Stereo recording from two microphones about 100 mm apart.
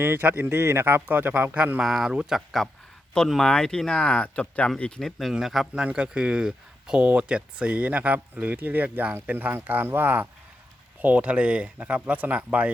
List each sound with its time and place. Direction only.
0.0 s speech: 20° right (ahead or behind)
1.8 s speech: 5° right (ahead or behind)